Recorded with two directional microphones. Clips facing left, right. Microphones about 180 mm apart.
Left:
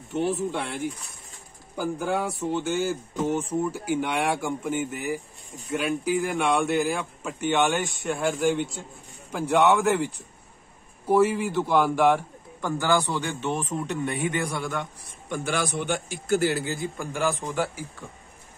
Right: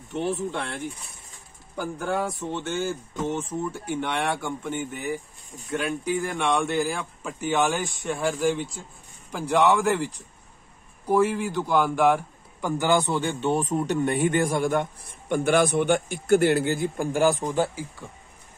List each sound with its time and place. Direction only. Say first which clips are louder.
0.1 s speech: left 1 dB; centre (ahead or behind)
11.1 s speech: left 1 dB; 5° left (ahead or behind)
12.6 s speech: right 1 dB; 20° right (ahead or behind); by 17.6 s 35° right (ahead or behind)
18.0 s speech: even; 10° right (ahead or behind)